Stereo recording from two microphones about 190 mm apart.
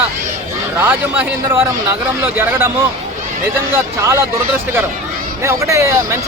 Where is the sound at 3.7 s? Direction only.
15° right (ahead or behind).